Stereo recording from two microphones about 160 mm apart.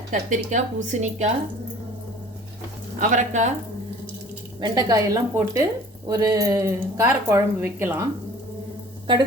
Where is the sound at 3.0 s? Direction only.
50° right (ahead or behind).